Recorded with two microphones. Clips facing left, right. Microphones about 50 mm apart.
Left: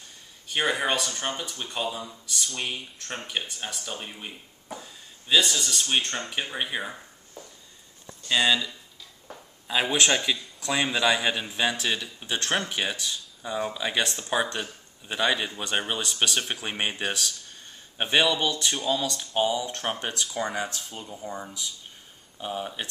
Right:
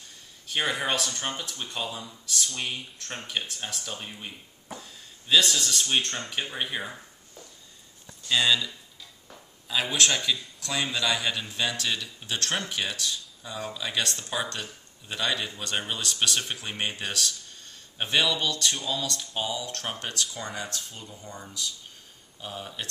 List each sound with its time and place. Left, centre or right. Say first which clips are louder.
0.5 s speech: left 2 dB; centre
8.1 s a man's voice: left 1 dB; centre
16.6 s a man's voice: left 3 dB; centre
17.2 s speech: right 1 dB; centre
17.6 s a man's voice: left 3 dB; centre